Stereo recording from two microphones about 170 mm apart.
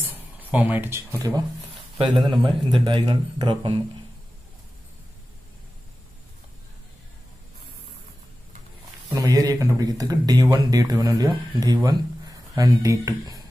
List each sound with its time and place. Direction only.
0.1 s speech: 10° right (ahead or behind)
2.0 s speech: 30° right (ahead or behind)
9.1 s speech: 25° right (ahead or behind)